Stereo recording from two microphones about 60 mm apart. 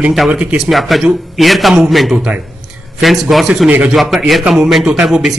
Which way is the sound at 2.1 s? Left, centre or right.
Centre.